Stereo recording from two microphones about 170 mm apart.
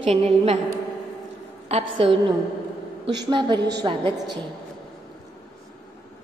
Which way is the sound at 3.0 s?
90° right.